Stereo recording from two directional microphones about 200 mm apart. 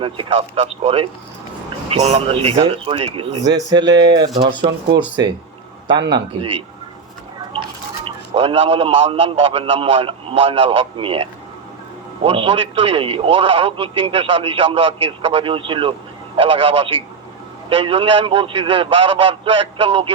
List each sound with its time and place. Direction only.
0.0 s a man's voice: 25° right (ahead or behind)
8.0 s a man's voice: 30° right (ahead or behind)